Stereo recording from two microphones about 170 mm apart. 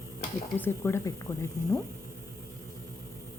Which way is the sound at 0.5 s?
10° left (ahead or behind).